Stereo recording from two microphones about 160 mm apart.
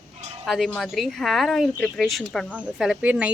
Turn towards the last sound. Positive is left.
turn(degrees=-10)  # may be behind; listen again after turning